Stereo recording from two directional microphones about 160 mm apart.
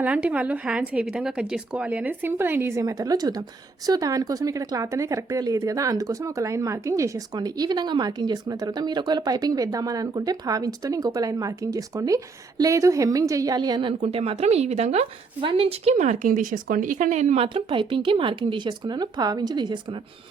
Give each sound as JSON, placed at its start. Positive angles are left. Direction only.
{"t": 0.0, "sound": "a woman's voice", "side_deg": -10}
{"t": 14.0, "sound": "speech", "side_deg": -40}